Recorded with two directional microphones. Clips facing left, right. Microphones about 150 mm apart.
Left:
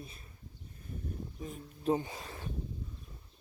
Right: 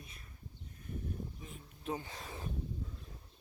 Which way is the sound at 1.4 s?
40° left (ahead or behind).